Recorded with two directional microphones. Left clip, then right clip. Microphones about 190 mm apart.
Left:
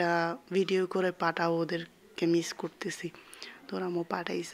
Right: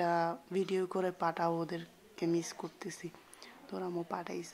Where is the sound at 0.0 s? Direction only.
15° left (ahead or behind).